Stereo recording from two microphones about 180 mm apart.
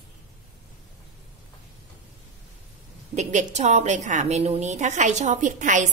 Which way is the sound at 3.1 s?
40° right (ahead or behind).